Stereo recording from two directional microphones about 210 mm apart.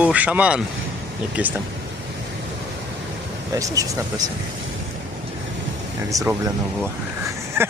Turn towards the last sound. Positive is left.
turn(degrees=-10)  # may be behind; listen again after turning